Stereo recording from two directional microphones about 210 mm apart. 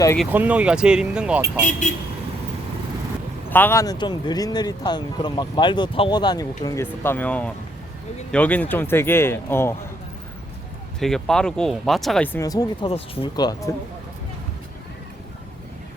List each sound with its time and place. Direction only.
0.2 s speech: 10° right (ahead or behind)
3.5 s speech: 10° left (ahead or behind)
11.0 s speech: centre (ahead or behind); by 13.7 s 20° left (ahead or behind)